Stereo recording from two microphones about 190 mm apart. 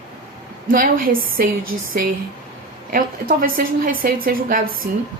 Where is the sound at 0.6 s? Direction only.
45° right (ahead or behind).